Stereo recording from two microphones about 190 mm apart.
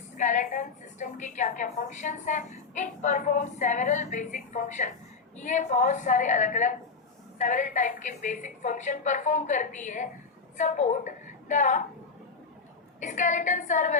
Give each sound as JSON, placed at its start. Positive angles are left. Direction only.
{"t": 0.2, "sound": "a woman's voice", "side_deg": 40}
{"t": 13.0, "sound": "a woman's voice", "side_deg": 40}